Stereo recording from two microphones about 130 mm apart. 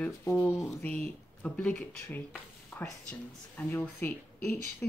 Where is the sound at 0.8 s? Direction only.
10° left (ahead or behind).